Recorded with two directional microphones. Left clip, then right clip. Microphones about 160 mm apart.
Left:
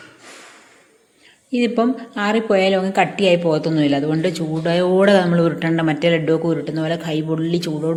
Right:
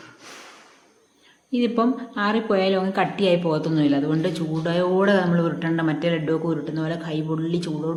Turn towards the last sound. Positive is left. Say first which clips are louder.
# left 5 dB
turn(degrees=20)  # may be behind; listen again after turning